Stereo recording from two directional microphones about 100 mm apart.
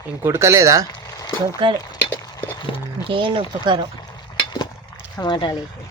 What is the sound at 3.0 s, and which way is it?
Speech, 60° right (ahead or behind).